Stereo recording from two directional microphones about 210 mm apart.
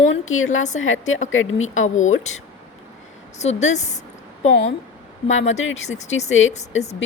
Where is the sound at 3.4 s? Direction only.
35° left (ahead or behind).